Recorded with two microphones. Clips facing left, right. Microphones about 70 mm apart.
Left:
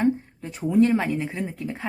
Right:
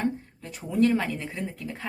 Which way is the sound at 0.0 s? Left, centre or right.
Left.